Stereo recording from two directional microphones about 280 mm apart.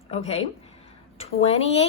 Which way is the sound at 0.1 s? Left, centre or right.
Left.